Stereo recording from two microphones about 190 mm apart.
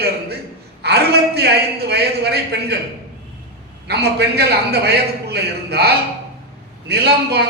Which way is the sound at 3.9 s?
60° right (ahead or behind).